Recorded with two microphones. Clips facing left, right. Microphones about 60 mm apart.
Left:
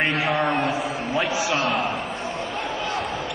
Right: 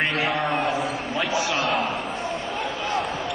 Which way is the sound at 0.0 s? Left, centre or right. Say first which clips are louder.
Left 1 dB; left.